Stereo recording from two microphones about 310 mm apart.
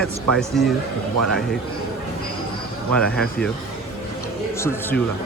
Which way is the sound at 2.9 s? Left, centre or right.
Centre.